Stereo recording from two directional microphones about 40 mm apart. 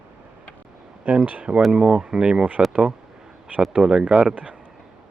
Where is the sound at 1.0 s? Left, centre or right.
Right.